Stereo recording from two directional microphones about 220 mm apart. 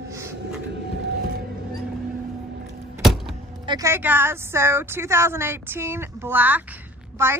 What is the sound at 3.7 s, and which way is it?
A woman's voice, 15° right (ahead or behind).